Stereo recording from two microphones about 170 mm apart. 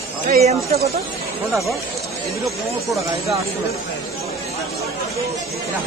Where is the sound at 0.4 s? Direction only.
40° right (ahead or behind).